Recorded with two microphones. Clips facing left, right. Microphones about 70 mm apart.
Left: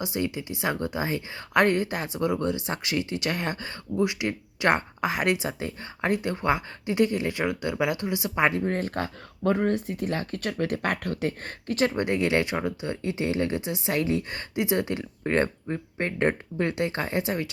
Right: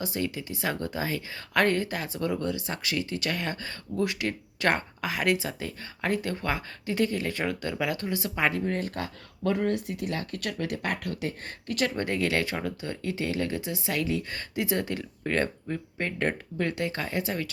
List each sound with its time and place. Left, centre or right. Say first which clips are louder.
0.0 s speech: left 2 dB; left
8.6 s speech: left 3 dB; left